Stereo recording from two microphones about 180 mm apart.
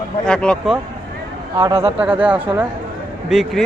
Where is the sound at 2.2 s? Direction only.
10° right (ahead or behind).